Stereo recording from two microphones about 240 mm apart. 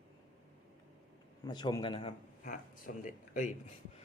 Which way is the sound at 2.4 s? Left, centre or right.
Left.